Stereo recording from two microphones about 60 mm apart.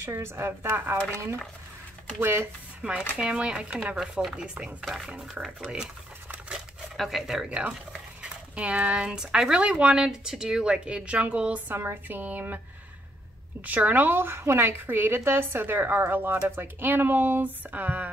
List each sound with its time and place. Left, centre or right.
0.0 s a woman's voice: right
2.8 s speech: right
4.2 s speech: centre
6.5 s chopping: centre
7.4 s speech: centre
11.7 s a woman's voice: right
13.7 s a woman's voice: right